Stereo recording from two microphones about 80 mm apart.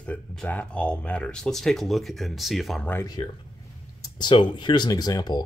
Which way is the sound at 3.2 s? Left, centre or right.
Left.